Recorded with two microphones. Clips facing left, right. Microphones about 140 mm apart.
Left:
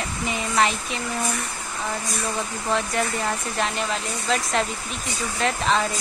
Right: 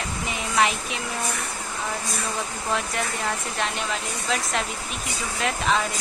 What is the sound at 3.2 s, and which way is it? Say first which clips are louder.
Speech: left 2 dB; centre (ahead or behind).